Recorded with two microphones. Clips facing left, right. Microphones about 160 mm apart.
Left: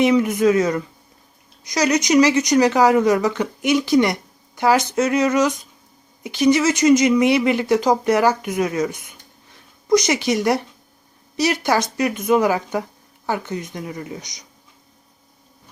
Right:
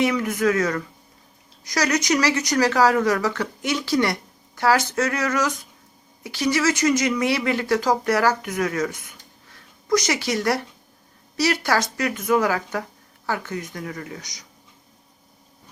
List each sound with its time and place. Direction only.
0.0 s speech: 20° left (ahead or behind)